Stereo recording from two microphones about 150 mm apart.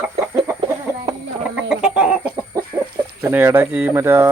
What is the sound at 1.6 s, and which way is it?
Chicken, 5° right (ahead or behind).